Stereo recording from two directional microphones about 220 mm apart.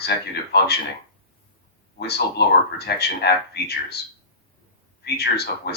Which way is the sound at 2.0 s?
50° left (ahead or behind).